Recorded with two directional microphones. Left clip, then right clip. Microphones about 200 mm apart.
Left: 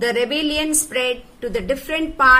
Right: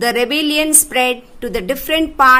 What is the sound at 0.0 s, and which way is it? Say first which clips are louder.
A woman's voice: right 4 dB; 50° right (ahead or behind).